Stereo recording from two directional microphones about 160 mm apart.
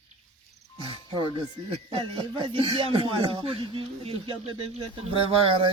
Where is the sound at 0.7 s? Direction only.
30° left (ahead or behind).